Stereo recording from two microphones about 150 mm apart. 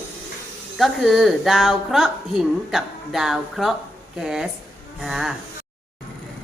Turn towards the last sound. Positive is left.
turn(degrees=0)  # may be behind; listen again after turning